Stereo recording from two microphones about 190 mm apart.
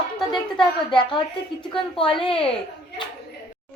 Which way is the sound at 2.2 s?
30° left (ahead or behind).